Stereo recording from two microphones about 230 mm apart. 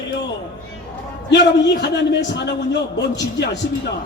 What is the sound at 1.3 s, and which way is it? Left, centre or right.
A man's voice, left.